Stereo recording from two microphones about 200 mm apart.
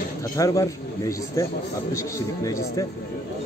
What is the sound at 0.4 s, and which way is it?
A man's voice, 15° left (ahead or behind).